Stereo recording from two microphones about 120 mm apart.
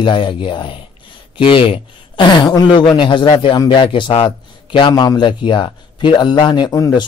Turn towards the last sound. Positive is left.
turn(degrees=25)  # may be behind; listen again after turning